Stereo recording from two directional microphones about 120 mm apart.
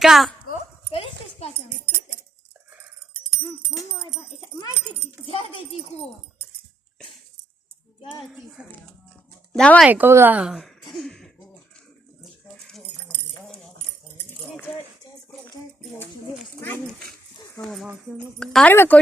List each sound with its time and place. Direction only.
0.0 s a child's voice: centre (ahead or behind)
0.9 s dog: 50° left (ahead or behind)
5.2 s speech: 50° left (ahead or behind)
8.2 s a child's voice: centre (ahead or behind)
9.5 s speech: 10° left (ahead or behind)
9.8 s speech: 15° right (ahead or behind); by 11.3 s 5° left (ahead or behind)
12.2 s a sound: centre (ahead or behind)
17.6 s a child's voice: 5° left (ahead or behind)
18.7 s speech: 20° left (ahead or behind)